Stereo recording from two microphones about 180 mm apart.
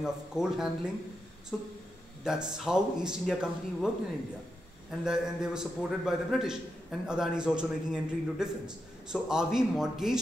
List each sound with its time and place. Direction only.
0.0 s a man's voice: 5° right (ahead or behind)
5.0 s a man's voice: 5° right (ahead or behind)